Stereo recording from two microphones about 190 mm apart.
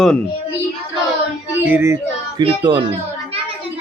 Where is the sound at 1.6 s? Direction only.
10° right (ahead or behind).